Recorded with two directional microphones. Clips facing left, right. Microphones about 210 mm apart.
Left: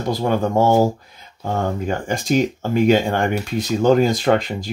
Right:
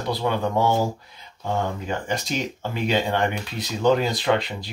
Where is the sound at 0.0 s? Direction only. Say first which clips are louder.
Left 4 dB; 45° left (ahead or behind).